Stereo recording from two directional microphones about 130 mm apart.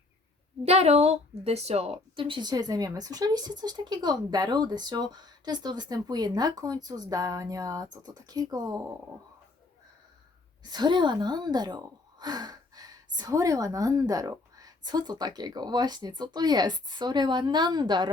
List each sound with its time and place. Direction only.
0.6 s speech: 55° right (ahead or behind); by 8.8 s 30° right (ahead or behind)
10.6 s speech: 30° right (ahead or behind)